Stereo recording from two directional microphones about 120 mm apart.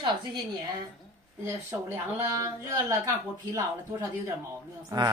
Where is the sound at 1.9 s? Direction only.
25° right (ahead or behind).